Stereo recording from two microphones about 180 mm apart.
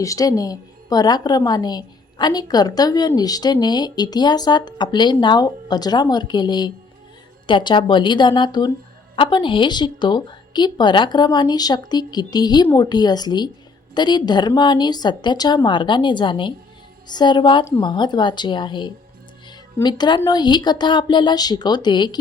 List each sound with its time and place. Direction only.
0.0 s a woman's voice: 20° left (ahead or behind)